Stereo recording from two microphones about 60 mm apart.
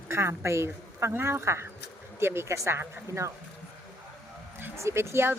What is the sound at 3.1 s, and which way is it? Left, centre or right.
Speech, right.